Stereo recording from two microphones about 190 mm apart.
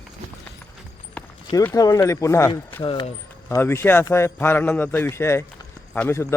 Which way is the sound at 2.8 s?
25° left (ahead or behind).